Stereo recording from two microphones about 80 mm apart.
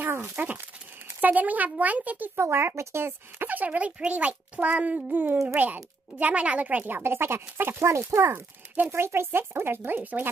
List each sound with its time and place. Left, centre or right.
0.0 s speech: right
2.3 s speech: right